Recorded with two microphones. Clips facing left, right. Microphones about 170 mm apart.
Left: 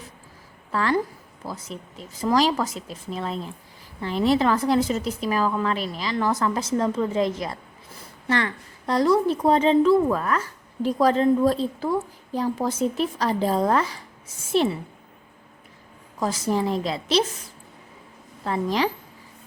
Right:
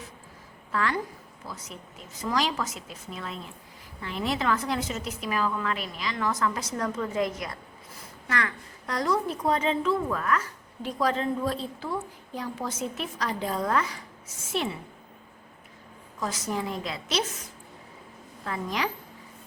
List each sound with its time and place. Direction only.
0.7 s a woman's voice: 35° left (ahead or behind)
16.2 s a woman's voice: 30° left (ahead or behind)
18.4 s a woman's voice: 30° left (ahead or behind)